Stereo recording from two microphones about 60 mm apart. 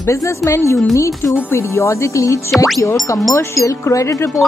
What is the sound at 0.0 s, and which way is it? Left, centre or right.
Speech, left.